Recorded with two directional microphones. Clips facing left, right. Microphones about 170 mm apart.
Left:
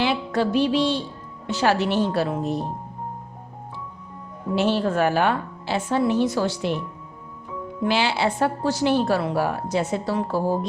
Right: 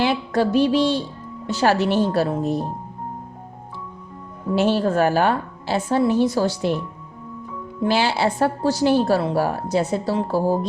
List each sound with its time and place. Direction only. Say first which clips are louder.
0.0 s a woman's voice: right 2 dB; 40° right (ahead or behind)
4.5 s a woman's voice: right 3 dB; 40° right (ahead or behind)
7.9 s a woman's voice: right 2 dB; 40° right (ahead or behind)